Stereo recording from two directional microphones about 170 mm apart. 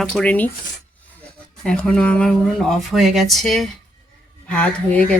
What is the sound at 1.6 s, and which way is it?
A woman's voice, 5° left (ahead or behind).